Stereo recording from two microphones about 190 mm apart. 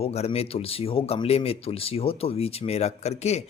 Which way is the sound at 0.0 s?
30° left (ahead or behind).